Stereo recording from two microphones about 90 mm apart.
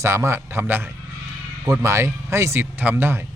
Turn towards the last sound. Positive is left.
turn(degrees=-25)  # may be behind; listen again after turning